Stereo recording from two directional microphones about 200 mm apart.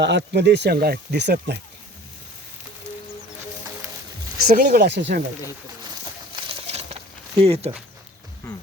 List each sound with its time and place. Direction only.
0.0 s speech: 60° right (ahead or behind)
4.4 s speech: 45° right (ahead or behind)
6.3 s a sound: 30° right (ahead or behind)
7.3 s speech: 30° right (ahead or behind)